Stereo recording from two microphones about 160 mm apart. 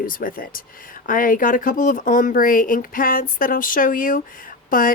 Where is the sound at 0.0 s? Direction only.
60° left (ahead or behind).